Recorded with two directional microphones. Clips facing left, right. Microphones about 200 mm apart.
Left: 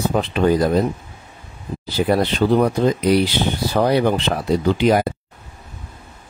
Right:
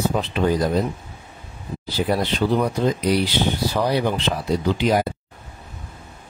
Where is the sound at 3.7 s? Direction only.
55° left (ahead or behind).